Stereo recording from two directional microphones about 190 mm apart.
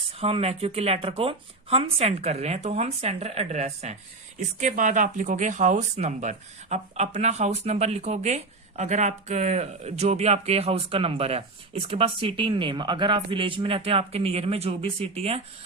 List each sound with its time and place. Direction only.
0.2 s speech: 30° right (ahead or behind)